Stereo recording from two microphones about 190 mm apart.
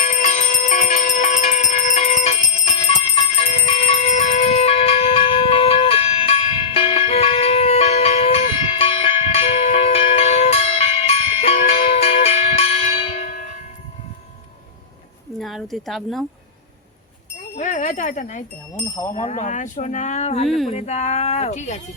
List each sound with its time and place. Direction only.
0.0 s bell: 40° left (ahead or behind)
15.4 s a sound: centre (ahead or behind)
17.6 s speech: 40° left (ahead or behind)